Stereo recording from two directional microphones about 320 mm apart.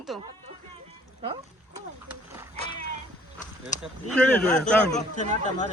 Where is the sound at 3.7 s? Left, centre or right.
Left.